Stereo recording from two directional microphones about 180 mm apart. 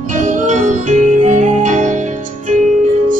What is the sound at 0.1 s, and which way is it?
Music, 45° right (ahead or behind).